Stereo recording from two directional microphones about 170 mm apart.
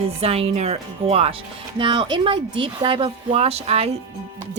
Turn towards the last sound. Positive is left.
turn(degrees=-35)  # may be behind; listen again after turning